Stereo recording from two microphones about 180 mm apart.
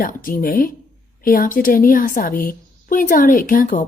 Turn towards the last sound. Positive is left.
turn(degrees=50)  # may be behind; listen again after turning